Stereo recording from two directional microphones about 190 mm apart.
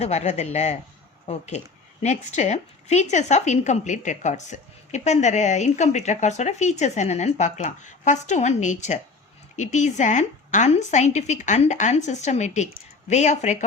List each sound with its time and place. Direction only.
0.0 s a woman's voice: 35° left (ahead or behind)